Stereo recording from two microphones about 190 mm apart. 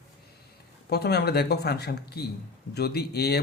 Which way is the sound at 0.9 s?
60° left (ahead or behind).